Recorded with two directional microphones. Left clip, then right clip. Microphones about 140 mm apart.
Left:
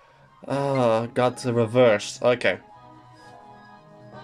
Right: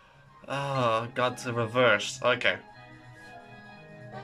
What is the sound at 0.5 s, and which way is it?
Speech, 35° left (ahead or behind).